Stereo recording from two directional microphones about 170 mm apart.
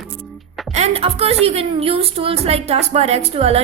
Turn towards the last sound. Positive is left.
turn(degrees=-35)  # may be behind; listen again after turning